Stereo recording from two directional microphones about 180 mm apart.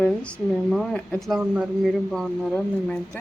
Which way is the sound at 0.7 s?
5° left (ahead or behind).